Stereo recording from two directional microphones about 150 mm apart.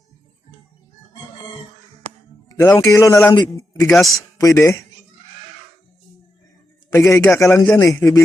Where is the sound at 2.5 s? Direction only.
20° left (ahead or behind).